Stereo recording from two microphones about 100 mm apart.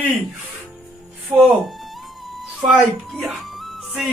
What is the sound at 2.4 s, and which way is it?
Music, centre (ahead or behind).